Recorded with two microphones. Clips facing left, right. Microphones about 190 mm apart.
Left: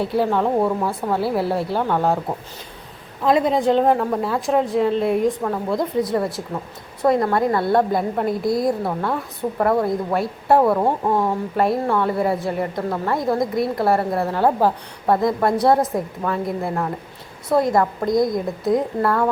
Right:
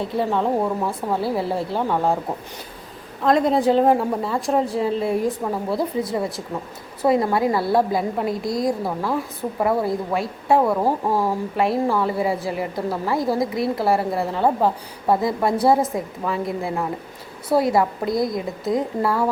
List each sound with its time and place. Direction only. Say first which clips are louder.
0.2 s a woman's voice: left 2 dB; centre (ahead or behind)
3.2 s a woman's voice: even; centre (ahead or behind)